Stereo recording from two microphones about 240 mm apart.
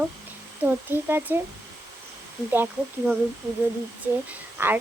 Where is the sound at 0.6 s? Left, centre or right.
Centre.